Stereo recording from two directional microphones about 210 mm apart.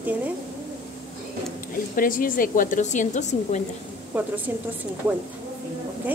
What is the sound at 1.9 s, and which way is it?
A woman's voice, 40° left (ahead or behind).